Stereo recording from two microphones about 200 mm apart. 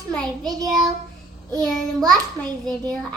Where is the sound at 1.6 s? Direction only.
Centre (ahead or behind).